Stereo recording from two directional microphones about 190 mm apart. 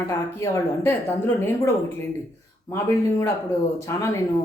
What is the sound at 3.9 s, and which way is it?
Speech, 15° left (ahead or behind).